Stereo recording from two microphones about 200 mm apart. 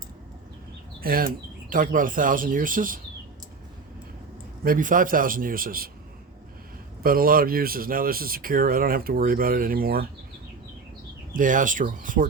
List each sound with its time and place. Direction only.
1.0 s speech: 45° right (ahead or behind)
4.6 s speech: 45° right (ahead or behind)
7.0 s speech: 45° right (ahead or behind)
11.3 s speech: 40° right (ahead or behind)